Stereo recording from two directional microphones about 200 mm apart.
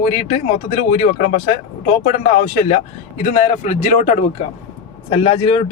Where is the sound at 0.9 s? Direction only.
35° left (ahead or behind).